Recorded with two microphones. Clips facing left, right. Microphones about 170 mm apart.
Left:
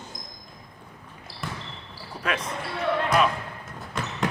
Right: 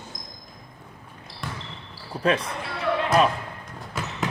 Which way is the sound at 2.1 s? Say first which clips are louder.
Right 7 dB; 30° right (ahead or behind).